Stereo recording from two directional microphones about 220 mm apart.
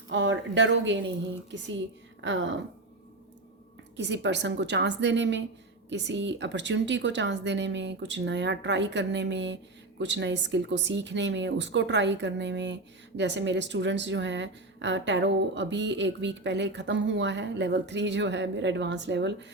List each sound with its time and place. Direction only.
0.1 s a woman's voice: 55° right (ahead or behind)
3.9 s a woman's voice: 55° right (ahead or behind)